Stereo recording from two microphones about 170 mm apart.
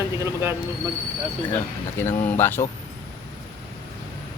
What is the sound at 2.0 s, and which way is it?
Speech, 15° left (ahead or behind).